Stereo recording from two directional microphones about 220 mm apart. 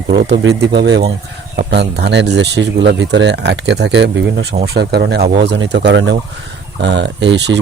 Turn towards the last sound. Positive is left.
turn(degrees=-50)  # may be behind; listen again after turning